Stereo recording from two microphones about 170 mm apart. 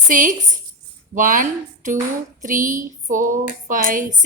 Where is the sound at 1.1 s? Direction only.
50° right (ahead or behind).